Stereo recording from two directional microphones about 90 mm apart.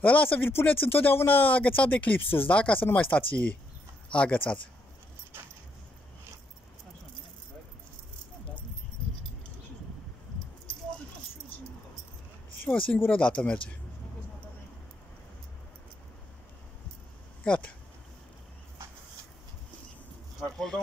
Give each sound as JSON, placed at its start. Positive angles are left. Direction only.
{"t": 0.0, "sound": "speech", "side_deg": 20}
{"t": 12.6, "sound": "speech", "side_deg": 15}
{"t": 17.5, "sound": "speech", "side_deg": 15}
{"t": 20.3, "sound": "speech", "side_deg": 5}